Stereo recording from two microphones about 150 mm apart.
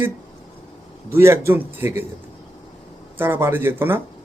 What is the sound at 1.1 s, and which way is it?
Speech, 15° right (ahead or behind).